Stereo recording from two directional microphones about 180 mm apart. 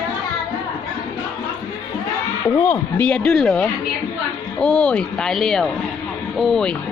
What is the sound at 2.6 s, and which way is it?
Speech, 10° left (ahead or behind).